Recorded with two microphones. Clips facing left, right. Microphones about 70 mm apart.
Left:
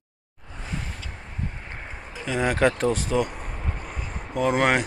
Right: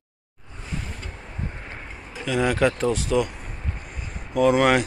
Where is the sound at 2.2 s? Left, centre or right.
Left.